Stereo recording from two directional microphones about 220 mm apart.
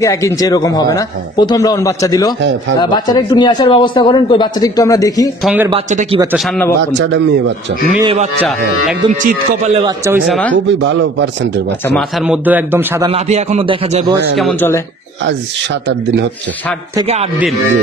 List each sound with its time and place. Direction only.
0.0 s a man's voice: 15° left (ahead or behind)
5.4 s speech: 5° right (ahead or behind)
5.7 s speech: 25° right (ahead or behind)
6.9 s a man's voice: 55° right (ahead or behind)
8.0 s speech: 25° right (ahead or behind)
9.8 s a man's voice: 15° right (ahead or behind)
10.2 s speech: centre (ahead or behind)
10.5 s a man's voice: 55° right (ahead or behind)
11.9 s a man's voice: centre (ahead or behind)
13.1 s speech: 30° right (ahead or behind)
14.3 s speech: centre (ahead or behind)